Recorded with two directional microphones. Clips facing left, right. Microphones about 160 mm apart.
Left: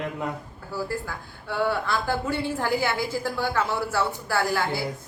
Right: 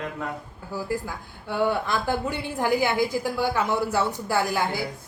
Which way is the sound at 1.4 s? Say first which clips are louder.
Right 1 dB; 15° right (ahead or behind).